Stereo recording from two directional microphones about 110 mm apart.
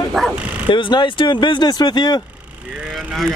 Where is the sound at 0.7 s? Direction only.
45° left (ahead or behind).